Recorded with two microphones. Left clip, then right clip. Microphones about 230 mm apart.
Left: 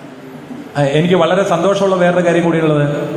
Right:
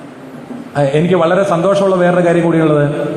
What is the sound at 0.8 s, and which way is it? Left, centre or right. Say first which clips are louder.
A man's voice: right 1 dB; right.